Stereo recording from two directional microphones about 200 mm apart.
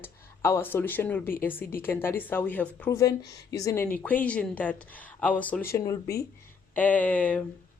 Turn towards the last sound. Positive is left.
turn(degrees=5)  # may be behind; listen again after turning